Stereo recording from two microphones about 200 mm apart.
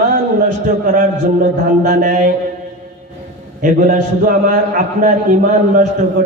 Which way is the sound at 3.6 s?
40° right (ahead or behind).